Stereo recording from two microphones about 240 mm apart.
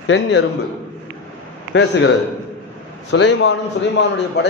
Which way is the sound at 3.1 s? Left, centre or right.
Left.